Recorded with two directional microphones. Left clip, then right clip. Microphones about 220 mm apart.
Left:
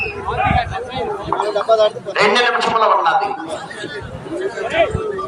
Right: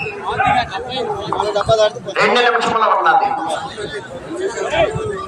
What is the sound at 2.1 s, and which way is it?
A man's voice, 45° left (ahead or behind).